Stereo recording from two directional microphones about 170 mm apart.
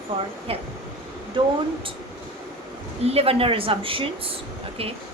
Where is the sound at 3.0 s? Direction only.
35° right (ahead or behind).